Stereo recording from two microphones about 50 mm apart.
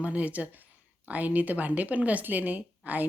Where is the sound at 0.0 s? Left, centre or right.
Right.